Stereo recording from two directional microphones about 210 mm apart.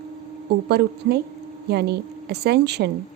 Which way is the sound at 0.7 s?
50° right (ahead or behind).